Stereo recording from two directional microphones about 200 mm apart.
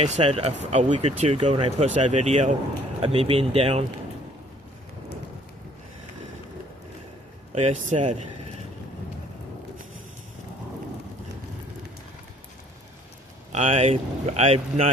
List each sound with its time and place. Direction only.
0.0 s speech: 35° right (ahead or behind)
7.5 s speech: 35° right (ahead or behind)
13.5 s speech: 35° right (ahead or behind)